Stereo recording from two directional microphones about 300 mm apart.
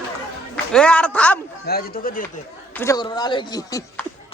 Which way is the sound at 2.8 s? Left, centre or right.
Centre.